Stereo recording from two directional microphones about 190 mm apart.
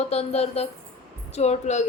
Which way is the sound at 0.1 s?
35° left (ahead or behind).